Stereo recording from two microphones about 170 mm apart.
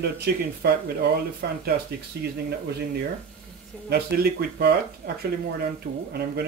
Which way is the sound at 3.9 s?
65° right (ahead or behind).